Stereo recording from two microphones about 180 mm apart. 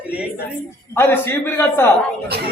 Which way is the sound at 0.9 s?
10° left (ahead or behind).